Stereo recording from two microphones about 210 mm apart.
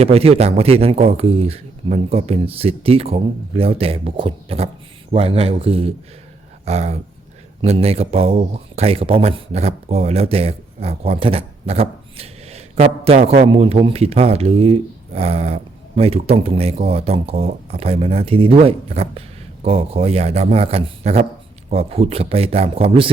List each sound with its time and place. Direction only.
0.0 s speech: 30° right (ahead or behind)
6.7 s a sound: 30° right (ahead or behind)
7.6 s speech: 30° right (ahead or behind)